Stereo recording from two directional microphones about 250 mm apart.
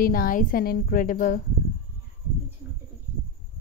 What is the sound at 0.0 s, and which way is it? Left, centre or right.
A woman's voice, left.